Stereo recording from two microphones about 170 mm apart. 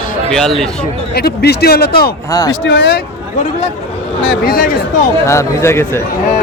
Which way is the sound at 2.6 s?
75° left (ahead or behind).